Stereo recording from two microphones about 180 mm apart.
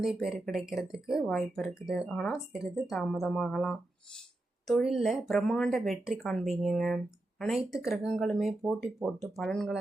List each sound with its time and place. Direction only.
0.0 s speech: centre (ahead or behind)